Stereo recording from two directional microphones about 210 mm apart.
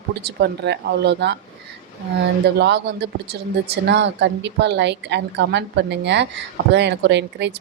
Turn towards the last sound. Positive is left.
turn(degrees=-55)  # may be behind; listen again after turning